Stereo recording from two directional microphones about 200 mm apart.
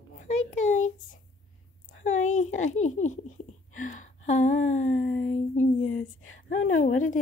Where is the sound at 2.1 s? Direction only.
40° left (ahead or behind).